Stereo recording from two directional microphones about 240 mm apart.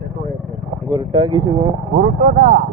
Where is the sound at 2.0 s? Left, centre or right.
Right.